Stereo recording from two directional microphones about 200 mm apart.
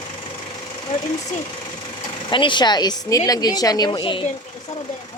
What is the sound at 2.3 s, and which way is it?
Speech, 25° left (ahead or behind).